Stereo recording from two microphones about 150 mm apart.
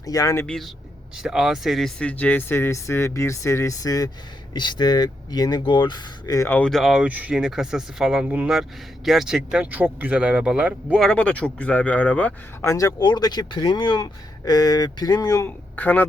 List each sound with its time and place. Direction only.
0.0 s speech: 25° left (ahead or behind)
0.4 s speech: 5° left (ahead or behind); by 6.6 s 20° left (ahead or behind)
6.6 s speech: centre (ahead or behind)
11.1 s speech: 10° left (ahead or behind)
12.7 s speech: 25° left (ahead or behind)